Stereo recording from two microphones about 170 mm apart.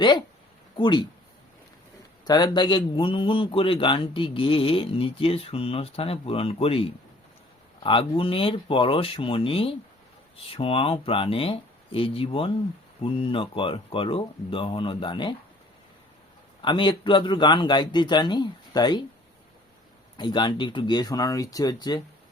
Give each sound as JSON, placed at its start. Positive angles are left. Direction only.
{"t": 0.8, "sound": "a man's voice", "side_deg": 25}
{"t": 2.2, "sound": "a man's voice", "side_deg": 25}
{"t": 16.6, "sound": "a man's voice", "side_deg": 30}
{"t": 20.1, "sound": "a man's voice", "side_deg": 25}